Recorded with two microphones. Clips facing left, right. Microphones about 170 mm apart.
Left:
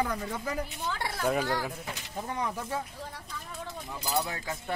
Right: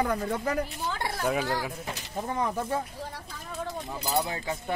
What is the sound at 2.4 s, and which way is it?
Speech, 50° right (ahead or behind).